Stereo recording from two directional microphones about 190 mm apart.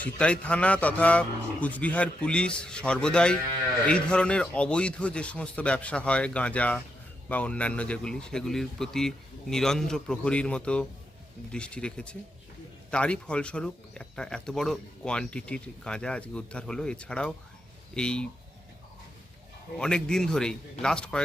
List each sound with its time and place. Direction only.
0.0 s speech: 5° left (ahead or behind)
19.8 s speech: 5° left (ahead or behind)